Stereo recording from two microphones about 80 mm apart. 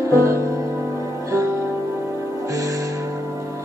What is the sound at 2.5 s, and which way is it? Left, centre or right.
Music, right.